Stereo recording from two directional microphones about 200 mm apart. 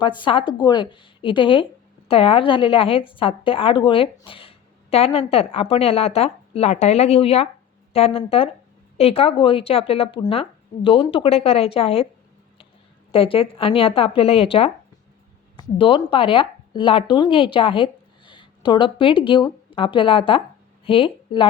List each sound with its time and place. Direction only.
0.2 s a woman's voice: 25° left (ahead or behind)
13.1 s a woman's voice: 25° left (ahead or behind)